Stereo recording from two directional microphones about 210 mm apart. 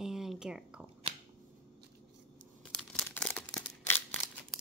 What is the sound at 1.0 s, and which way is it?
Shuffling cards, 25° right (ahead or behind).